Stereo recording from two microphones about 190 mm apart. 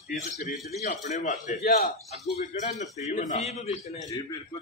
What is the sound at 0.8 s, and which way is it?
Speech, 40° left (ahead or behind).